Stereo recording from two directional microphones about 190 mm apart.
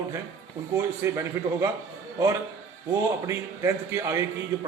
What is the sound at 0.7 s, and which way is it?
Speech, 15° right (ahead or behind).